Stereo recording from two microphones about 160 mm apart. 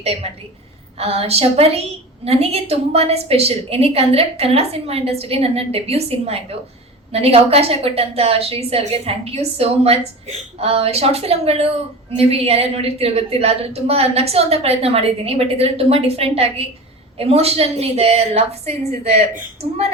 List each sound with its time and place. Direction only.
0.0 s a woman's voice: 40° right (ahead or behind)